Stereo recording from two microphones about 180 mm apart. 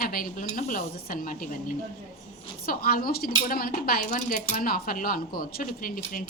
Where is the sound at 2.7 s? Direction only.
55° left (ahead or behind).